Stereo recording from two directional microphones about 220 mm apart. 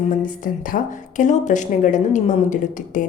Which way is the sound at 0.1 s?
40° left (ahead or behind).